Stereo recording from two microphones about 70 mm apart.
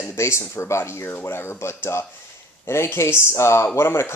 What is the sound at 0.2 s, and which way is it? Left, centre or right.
Speech, left.